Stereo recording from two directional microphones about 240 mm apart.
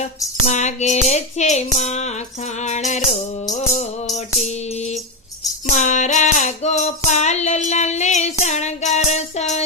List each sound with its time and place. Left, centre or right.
0.4 s music: left
5.6 s music: left